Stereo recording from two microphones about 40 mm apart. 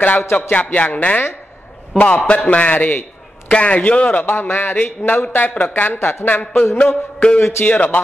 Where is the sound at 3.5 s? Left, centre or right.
Left.